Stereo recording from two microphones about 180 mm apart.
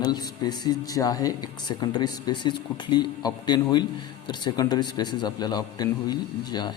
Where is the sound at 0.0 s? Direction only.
25° left (ahead or behind).